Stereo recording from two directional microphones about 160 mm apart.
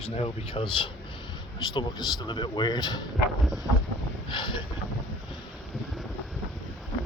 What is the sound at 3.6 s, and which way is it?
Wind, 15° left (ahead or behind).